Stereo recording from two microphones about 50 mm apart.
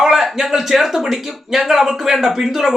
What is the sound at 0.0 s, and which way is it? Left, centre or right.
Speech, centre.